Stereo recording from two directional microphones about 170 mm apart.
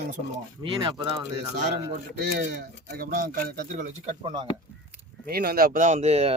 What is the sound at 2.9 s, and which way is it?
Speech, 60° right (ahead or behind).